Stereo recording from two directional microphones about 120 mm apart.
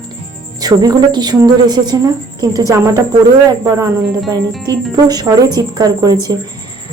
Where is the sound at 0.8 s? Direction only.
35° right (ahead or behind).